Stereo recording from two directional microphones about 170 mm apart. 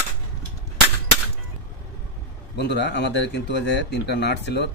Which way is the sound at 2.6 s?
90° left.